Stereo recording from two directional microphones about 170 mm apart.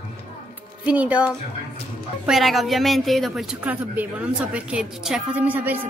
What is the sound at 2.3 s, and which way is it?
Speech, centre (ahead or behind).